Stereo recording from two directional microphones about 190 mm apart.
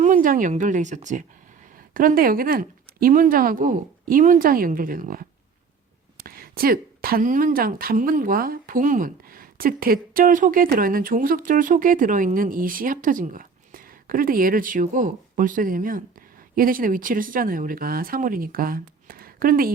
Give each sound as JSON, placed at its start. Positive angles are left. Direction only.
{"t": 0.0, "sound": "speech", "side_deg": -45}